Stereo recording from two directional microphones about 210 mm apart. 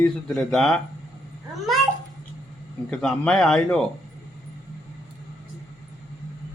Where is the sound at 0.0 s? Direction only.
Centre (ahead or behind).